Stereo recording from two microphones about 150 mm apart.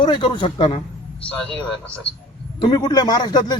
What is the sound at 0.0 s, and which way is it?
Speech, 35° left (ahead or behind).